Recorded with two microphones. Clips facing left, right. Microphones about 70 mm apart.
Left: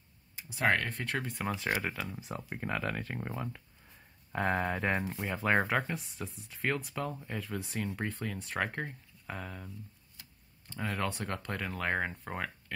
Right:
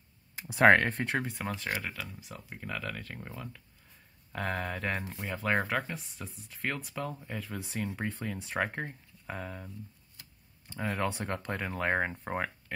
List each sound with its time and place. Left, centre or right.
0.7 s speech: right
0.9 s speech: right
1.2 s speech: centre
1.5 s speech: centre
2.1 s speech: left; by 5.0 s centre
5.0 s speech: centre
10.7 s speech: centre